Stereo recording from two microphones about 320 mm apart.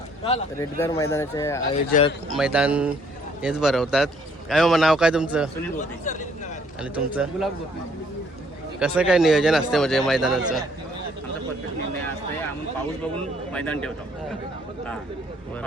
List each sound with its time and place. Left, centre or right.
0.3 s speech: centre
1.9 s a man's voice: centre
2.3 s a man's voice: centre
5.7 s a man's voice: left
6.8 s a man's voice: centre
8.8 s a man's voice: centre
13.5 s a man's voice: centre